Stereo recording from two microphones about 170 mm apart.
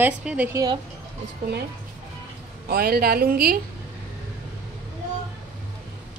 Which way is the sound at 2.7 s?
65° right (ahead or behind).